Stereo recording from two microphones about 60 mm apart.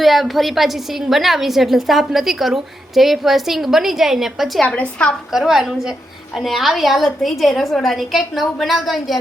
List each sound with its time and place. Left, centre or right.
0.0 s a woman's voice: centre
4.6 s a woman's voice: centre
5.3 s a woman's voice: centre